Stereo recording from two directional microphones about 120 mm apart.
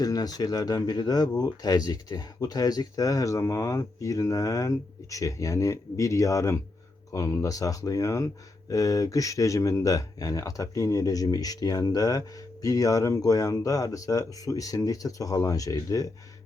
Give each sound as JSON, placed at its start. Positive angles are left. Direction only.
{"t": 0.0, "sound": "speech", "side_deg": 30}